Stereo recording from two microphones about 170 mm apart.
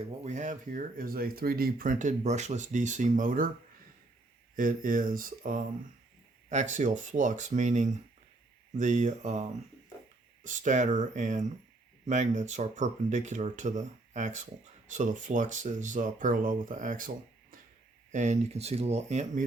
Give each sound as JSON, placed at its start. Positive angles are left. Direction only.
{"t": 0.3, "sound": "speech", "side_deg": -45}
{"t": 4.5, "sound": "speech", "side_deg": -55}
{"t": 18.1, "sound": "speech", "side_deg": -45}